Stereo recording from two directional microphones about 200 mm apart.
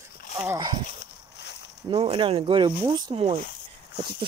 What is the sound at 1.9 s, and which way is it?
Speech, 25° right (ahead or behind).